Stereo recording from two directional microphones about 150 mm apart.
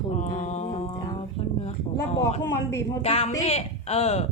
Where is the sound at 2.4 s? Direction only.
20° left (ahead or behind).